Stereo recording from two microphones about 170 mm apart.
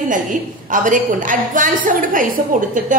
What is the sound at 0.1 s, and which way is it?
A woman's voice, 50° right (ahead or behind).